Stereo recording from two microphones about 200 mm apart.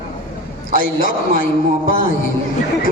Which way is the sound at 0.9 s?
45° left (ahead or behind).